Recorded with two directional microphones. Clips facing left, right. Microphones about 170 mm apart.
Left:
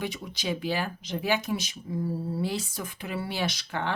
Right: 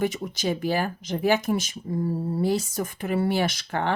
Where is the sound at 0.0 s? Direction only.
45° right (ahead or behind).